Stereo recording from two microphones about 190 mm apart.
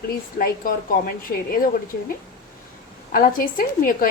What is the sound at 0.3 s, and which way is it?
Speech, 50° left (ahead or behind).